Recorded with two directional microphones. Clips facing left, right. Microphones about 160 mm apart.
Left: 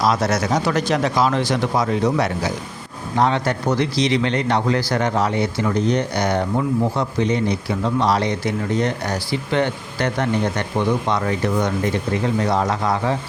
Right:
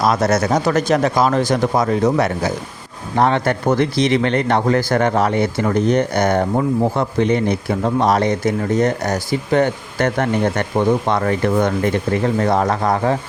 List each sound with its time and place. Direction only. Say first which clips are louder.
0.0 s speech: right 3 dB; 50° right (ahead or behind)